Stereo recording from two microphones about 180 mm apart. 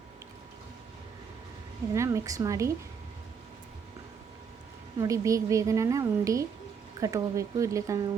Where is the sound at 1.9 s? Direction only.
15° right (ahead or behind).